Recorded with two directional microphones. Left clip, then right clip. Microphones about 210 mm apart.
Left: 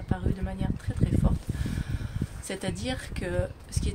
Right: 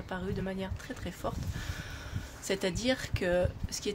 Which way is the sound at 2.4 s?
15° right (ahead or behind).